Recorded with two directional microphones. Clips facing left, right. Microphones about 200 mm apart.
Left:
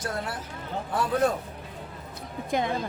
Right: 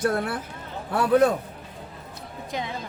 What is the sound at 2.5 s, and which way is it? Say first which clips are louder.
Speech: left 5 dB; 50° left (ahead or behind).